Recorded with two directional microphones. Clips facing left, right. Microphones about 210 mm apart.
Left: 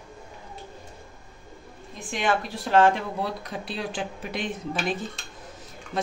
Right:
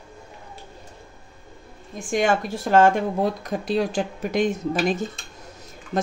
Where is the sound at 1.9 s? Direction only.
45° right (ahead or behind).